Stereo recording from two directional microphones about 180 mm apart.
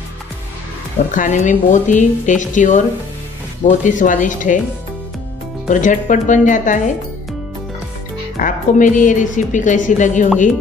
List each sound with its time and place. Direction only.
1.1 s a woman's voice: 45° left (ahead or behind)
5.7 s a woman's voice: 45° left (ahead or behind)
8.4 s a woman's voice: 45° left (ahead or behind)